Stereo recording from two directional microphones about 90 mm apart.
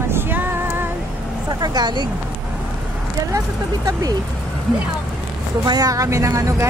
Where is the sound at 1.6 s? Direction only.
50° right (ahead or behind).